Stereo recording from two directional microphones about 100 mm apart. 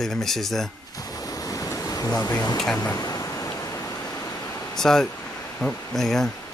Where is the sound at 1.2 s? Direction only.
35° left (ahead or behind).